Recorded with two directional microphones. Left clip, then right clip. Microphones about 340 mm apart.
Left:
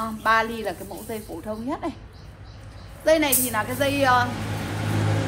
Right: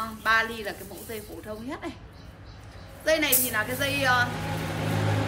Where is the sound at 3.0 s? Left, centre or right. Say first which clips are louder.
Left 4 dB; centre.